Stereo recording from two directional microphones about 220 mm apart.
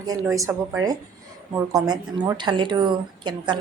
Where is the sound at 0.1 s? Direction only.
15° right (ahead or behind).